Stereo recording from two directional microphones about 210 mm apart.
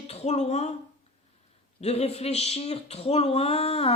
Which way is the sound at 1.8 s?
30° left (ahead or behind).